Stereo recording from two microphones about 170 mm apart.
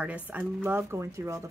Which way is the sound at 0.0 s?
10° right (ahead or behind).